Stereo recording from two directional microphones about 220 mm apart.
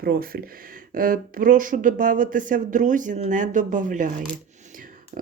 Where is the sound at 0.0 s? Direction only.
40° right (ahead or behind).